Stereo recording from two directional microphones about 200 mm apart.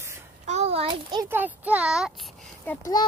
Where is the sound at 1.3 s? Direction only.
10° right (ahead or behind).